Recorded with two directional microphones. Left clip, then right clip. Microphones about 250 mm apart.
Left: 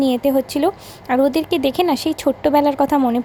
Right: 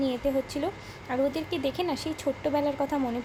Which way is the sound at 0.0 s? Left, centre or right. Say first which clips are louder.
Left 11 dB; left.